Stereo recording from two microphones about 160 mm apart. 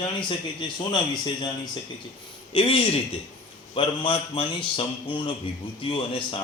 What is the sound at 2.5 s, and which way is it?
A man's voice, 35° left (ahead or behind).